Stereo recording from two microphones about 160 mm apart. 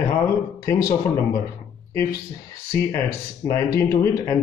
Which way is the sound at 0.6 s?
20° left (ahead or behind).